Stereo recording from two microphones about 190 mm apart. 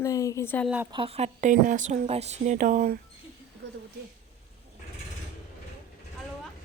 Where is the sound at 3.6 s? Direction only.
65° right (ahead or behind).